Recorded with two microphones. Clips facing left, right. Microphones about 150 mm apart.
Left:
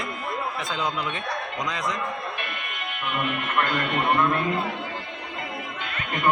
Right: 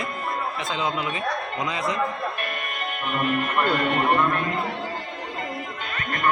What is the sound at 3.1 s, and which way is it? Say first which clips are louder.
Speech: right 2 dB; 40° right (ahead or behind).